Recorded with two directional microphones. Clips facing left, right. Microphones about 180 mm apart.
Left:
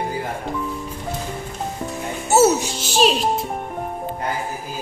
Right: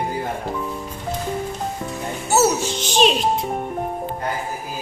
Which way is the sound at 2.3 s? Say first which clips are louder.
Left 3 dB; 25° left (ahead or behind).